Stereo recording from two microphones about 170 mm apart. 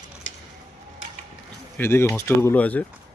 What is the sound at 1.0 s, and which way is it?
Mechanisms, 90° left.